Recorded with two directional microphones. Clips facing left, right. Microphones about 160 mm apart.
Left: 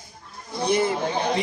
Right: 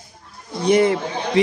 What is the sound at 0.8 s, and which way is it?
Speech, 90° right.